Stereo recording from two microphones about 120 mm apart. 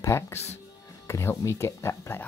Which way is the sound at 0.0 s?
25° left (ahead or behind).